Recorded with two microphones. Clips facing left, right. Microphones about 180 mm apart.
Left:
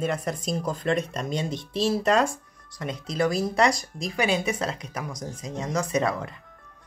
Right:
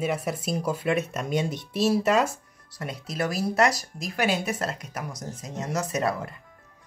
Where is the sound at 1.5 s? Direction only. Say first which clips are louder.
Right 1 dB; 25° left (ahead or behind).